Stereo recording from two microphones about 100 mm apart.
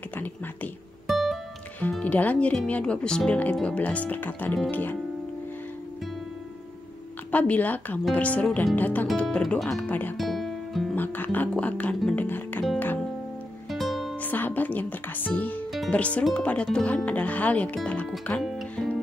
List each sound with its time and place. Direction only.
1.0 s music: centre (ahead or behind)
1.8 s speech: 15° left (ahead or behind)
7.2 s speech: 15° left (ahead or behind)
9.6 s speech: 5° left (ahead or behind)
9.8 s speech: 15° left (ahead or behind)
10.1 s music: centre (ahead or behind)
11.0 s speech: 20° left (ahead or behind)
12.2 s music: 20° left (ahead or behind)
13.7 s music: centre (ahead or behind)
14.2 s speech: 20° left (ahead or behind)
18.4 s music: centre (ahead or behind)